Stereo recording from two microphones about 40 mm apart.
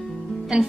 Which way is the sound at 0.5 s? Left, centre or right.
Right.